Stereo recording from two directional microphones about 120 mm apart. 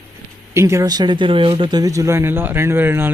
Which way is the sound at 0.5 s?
25° right (ahead or behind).